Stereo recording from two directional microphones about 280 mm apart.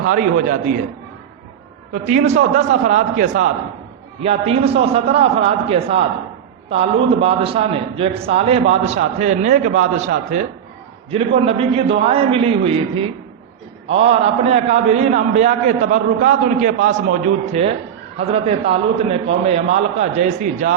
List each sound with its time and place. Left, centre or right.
0.0 s a man's voice: right
1.9 s a man's voice: right